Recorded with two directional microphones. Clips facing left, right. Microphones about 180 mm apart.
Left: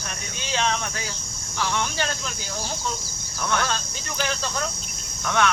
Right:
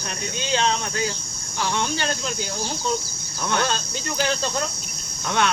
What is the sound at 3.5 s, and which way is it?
Speech, 30° right (ahead or behind).